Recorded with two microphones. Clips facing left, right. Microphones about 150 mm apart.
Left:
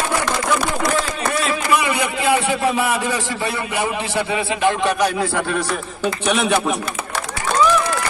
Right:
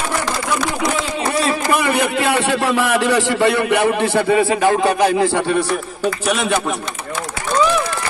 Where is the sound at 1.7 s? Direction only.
55° right (ahead or behind); by 5.0 s 40° right (ahead or behind).